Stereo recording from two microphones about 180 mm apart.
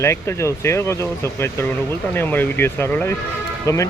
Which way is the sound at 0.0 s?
15° left (ahead or behind).